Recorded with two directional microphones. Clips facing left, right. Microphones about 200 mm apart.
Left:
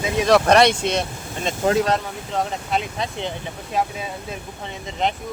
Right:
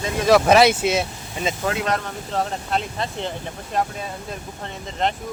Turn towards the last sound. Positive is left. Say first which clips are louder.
# even
turn(degrees=0)  # may be behind; listen again after turning